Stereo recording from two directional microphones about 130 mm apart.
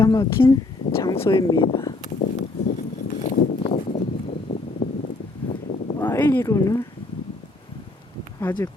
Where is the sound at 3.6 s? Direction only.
55° left (ahead or behind).